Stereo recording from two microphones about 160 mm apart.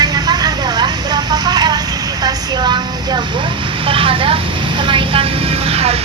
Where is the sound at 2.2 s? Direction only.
25° right (ahead or behind).